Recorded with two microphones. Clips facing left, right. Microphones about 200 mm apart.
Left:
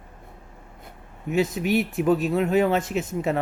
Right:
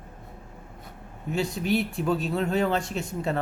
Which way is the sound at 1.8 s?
20° left (ahead or behind).